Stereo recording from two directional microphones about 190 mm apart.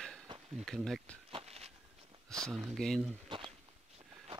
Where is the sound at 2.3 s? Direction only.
Centre (ahead or behind).